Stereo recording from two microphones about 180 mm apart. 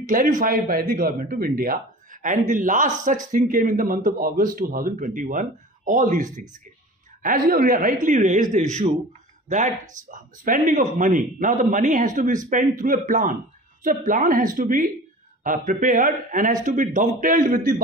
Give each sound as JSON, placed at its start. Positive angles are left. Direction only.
{"t": 0.0, "sound": "speech", "side_deg": -45}
{"t": 10.1, "sound": "speech", "side_deg": -50}